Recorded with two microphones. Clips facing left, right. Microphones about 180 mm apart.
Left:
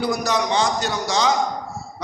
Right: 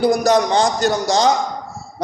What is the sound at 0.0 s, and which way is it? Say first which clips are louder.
A man's voice: right 7 dB; 45° right (ahead or behind).